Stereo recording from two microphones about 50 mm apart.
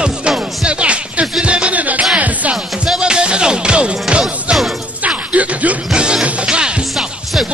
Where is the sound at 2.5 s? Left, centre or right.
Centre.